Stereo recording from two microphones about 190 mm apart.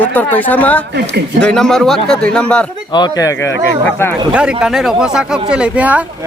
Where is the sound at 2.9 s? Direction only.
20° left (ahead or behind).